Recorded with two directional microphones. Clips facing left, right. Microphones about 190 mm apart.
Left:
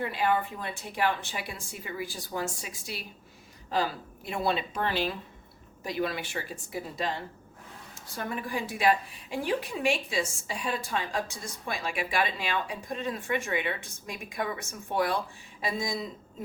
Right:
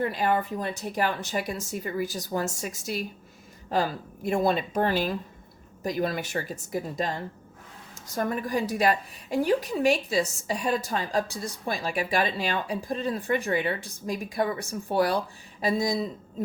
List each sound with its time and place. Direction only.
0.0 s a woman's voice: 40° right (ahead or behind)